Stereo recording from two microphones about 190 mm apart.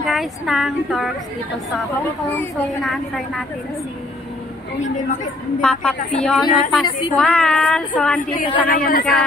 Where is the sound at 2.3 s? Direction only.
Centre (ahead or behind).